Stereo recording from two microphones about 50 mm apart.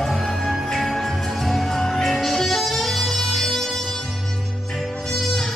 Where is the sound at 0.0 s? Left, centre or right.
Centre.